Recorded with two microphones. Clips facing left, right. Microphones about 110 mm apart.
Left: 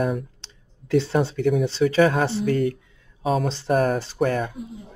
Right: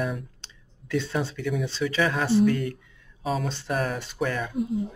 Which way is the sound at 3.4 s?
30° left (ahead or behind).